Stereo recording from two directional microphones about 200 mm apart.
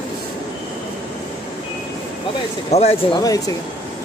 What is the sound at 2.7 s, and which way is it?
Speech, 30° left (ahead or behind).